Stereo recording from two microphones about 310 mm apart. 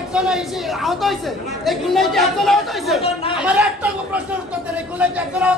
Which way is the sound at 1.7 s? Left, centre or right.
Centre.